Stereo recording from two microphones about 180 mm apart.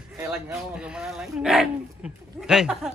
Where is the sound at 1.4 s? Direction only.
Centre (ahead or behind).